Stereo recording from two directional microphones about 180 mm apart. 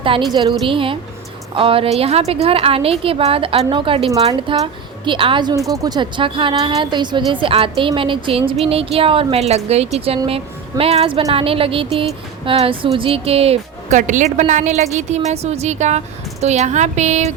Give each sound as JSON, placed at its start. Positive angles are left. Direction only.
{"t": 0.3, "sound": "a woman's voice", "side_deg": -25}